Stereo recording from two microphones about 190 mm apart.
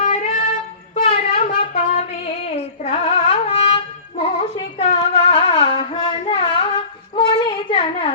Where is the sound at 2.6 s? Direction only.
35° left (ahead or behind).